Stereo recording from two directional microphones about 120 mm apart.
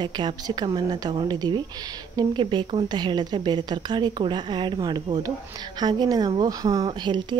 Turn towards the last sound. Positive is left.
turn(degrees=-40)  # may be behind; listen again after turning